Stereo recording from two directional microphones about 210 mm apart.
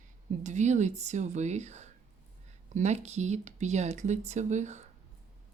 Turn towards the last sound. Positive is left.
turn(degrees=-35)  # may be behind; listen again after turning